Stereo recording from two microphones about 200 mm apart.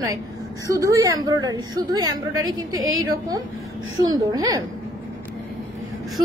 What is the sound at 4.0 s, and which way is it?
Speech, 20° right (ahead or behind).